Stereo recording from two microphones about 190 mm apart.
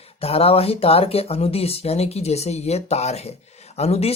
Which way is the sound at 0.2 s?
30° left (ahead or behind).